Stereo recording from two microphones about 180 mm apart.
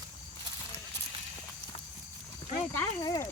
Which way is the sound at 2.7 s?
20° left (ahead or behind).